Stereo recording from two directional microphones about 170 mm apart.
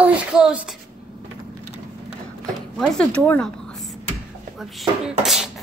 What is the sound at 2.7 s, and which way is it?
A woman's voice, centre (ahead or behind).